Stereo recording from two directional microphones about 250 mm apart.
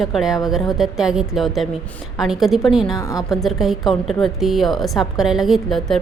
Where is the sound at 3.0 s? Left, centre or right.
Centre.